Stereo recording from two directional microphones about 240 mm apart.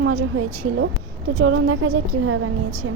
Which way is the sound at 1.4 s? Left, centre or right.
Right.